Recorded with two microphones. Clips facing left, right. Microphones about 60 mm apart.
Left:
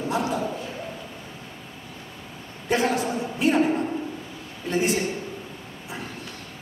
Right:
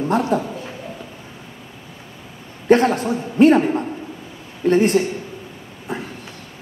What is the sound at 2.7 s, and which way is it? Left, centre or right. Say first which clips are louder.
Speech: right 8 dB; right.